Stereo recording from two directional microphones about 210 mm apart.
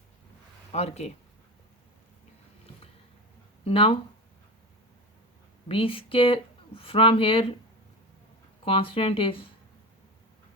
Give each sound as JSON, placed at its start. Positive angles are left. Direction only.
{"t": 0.7, "sound": "speech", "side_deg": 30}
{"t": 3.6, "sound": "speech", "side_deg": 25}
{"t": 5.6, "sound": "speech", "side_deg": 25}
{"t": 8.6, "sound": "speech", "side_deg": 25}